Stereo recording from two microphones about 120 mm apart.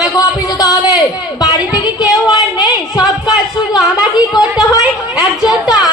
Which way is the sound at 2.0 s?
30° left (ahead or behind).